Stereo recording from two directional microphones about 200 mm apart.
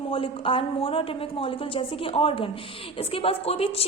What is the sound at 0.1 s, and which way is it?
A woman's voice, 25° left (ahead or behind).